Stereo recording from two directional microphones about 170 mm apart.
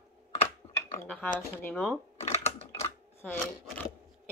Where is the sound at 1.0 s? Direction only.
5° left (ahead or behind).